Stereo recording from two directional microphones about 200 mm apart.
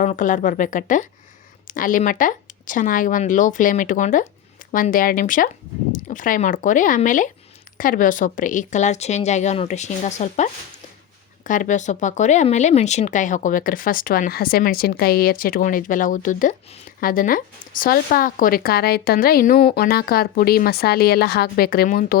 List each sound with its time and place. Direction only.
0.0 s speech: 40° left (ahead or behind)